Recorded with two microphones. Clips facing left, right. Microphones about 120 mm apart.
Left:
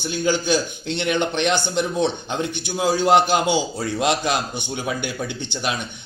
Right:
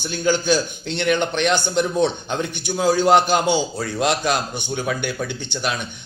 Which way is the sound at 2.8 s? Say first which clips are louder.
Right 1 dB; 10° left (ahead or behind).